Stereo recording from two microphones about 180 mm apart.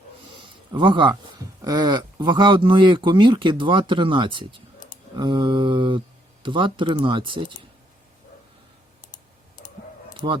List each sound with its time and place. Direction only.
0.7 s speech: 25° right (ahead or behind)